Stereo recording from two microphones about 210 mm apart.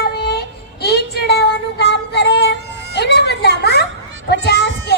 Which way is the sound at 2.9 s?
55° left (ahead or behind).